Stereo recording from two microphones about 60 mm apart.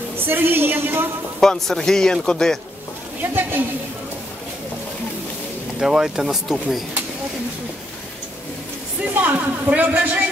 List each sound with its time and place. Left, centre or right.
0.2 s a woman's voice: right
1.4 s a man's voice: centre
3.2 s a woman's voice: right
5.8 s speech: centre
9.1 s speech: right